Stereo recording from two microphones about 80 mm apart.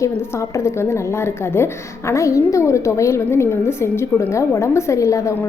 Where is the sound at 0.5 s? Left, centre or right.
Left.